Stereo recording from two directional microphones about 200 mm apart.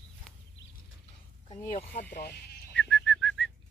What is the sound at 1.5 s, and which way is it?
Speech, 35° left (ahead or behind).